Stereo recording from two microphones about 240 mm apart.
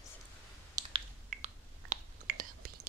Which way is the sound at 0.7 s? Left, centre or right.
Centre.